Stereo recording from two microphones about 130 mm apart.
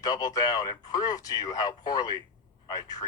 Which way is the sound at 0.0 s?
30° left (ahead or behind).